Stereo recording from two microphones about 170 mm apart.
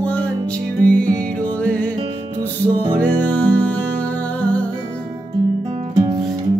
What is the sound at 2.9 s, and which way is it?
Music, 10° left (ahead or behind).